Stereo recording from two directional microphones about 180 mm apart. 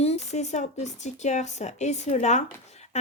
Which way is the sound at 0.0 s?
35° left (ahead or behind).